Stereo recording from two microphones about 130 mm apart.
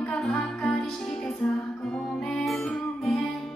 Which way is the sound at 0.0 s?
5° left (ahead or behind).